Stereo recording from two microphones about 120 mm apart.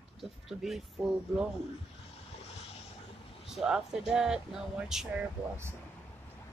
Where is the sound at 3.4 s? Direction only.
5° right (ahead or behind).